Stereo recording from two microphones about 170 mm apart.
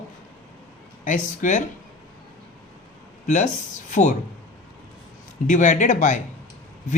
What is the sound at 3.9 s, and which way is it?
Speech, 45° left (ahead or behind).